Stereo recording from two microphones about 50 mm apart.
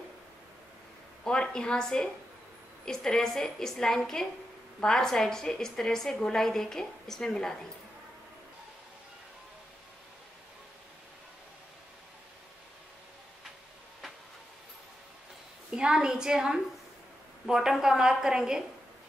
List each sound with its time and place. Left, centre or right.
1.2 s a woman's voice: centre
15.7 s a woman's voice: centre